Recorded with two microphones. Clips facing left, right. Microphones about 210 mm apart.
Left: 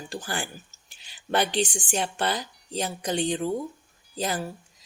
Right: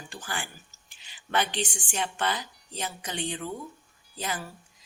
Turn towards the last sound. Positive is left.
turn(degrees=35)  # may be behind; listen again after turning